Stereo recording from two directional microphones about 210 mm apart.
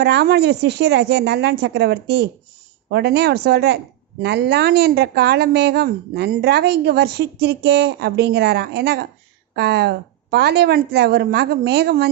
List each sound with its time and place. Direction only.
0.0 s speech: 50° right (ahead or behind)